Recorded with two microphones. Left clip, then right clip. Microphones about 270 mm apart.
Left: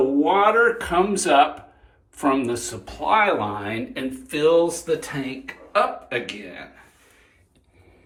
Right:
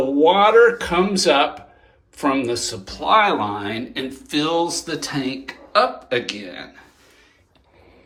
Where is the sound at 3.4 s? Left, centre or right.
Centre.